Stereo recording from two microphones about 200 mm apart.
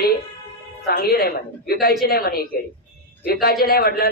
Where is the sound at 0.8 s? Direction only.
50° left (ahead or behind).